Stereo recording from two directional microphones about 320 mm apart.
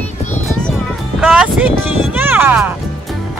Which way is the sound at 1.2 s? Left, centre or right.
Centre.